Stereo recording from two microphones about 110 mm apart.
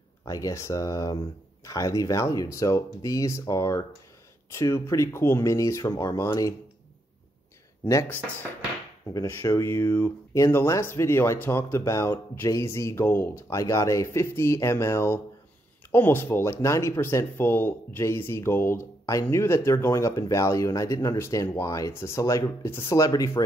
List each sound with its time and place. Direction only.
0.2 s speech: 30° left (ahead or behind)
7.8 s speech: 25° left (ahead or behind)